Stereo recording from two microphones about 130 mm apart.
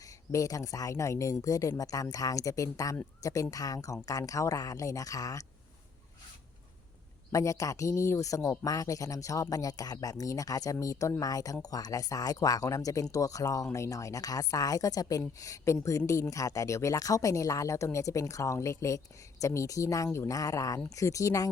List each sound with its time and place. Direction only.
0.3 s a woman's voice: 25° left (ahead or behind)
7.3 s a woman's voice: 25° left (ahead or behind)